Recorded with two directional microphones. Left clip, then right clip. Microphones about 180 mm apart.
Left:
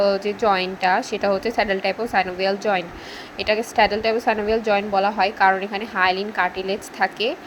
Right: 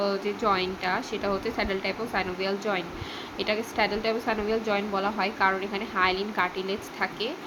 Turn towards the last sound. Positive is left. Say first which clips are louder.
# left 8 dB
turn(degrees=30)  # may be behind; listen again after turning